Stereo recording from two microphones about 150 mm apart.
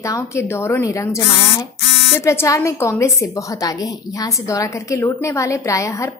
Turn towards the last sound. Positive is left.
turn(degrees=20)  # may be behind; listen again after turning